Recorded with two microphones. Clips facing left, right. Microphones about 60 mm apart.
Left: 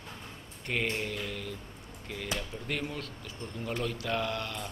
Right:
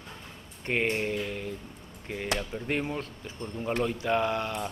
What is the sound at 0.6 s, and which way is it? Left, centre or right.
A man's voice, right.